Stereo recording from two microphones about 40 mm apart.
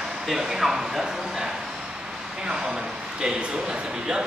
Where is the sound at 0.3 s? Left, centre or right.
Centre.